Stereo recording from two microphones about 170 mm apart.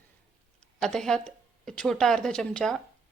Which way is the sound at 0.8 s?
5° left (ahead or behind).